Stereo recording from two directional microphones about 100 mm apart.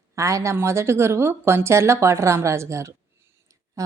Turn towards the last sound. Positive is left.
turn(degrees=-35)  # may be behind; listen again after turning